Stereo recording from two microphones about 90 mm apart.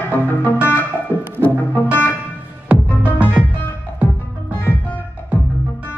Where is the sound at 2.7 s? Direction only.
15° right (ahead or behind).